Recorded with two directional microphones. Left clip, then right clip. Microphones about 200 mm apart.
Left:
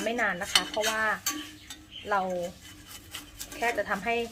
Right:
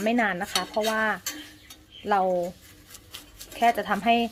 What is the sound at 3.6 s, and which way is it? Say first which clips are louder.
Speech: right 6 dB; 45° right (ahead or behind).